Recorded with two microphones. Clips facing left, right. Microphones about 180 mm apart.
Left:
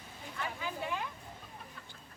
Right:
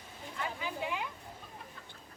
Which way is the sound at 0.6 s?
15° right (ahead or behind).